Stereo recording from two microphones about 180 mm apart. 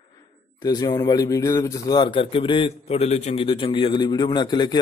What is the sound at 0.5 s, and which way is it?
A man's voice, 20° left (ahead or behind).